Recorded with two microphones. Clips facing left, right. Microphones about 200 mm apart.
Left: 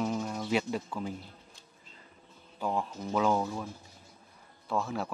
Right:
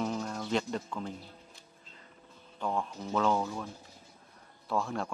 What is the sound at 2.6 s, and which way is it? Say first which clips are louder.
Speech: left 1 dB; 5° left (ahead or behind).